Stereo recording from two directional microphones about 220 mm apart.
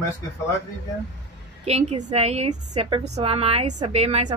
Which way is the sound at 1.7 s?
30° right (ahead or behind).